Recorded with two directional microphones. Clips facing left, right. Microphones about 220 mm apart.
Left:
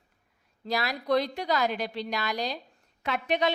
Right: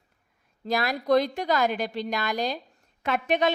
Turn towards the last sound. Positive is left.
turn(degrees=-50)  # may be behind; listen again after turning